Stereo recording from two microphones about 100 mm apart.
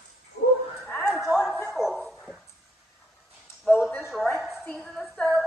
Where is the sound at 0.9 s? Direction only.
5° left (ahead or behind).